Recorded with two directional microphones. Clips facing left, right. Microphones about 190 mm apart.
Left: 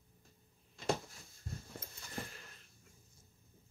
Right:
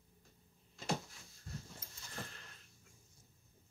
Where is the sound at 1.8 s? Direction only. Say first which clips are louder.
Left 5 dB; 60° left (ahead or behind).